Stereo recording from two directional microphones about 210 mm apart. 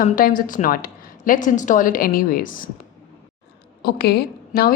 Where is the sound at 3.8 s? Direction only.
50° left (ahead or behind).